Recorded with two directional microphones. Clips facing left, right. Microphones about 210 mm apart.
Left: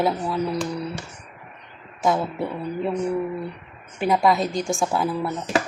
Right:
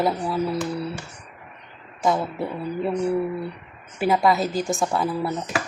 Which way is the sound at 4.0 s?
5° right (ahead or behind).